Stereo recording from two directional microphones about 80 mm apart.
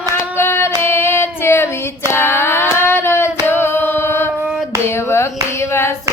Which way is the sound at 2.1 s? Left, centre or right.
Left.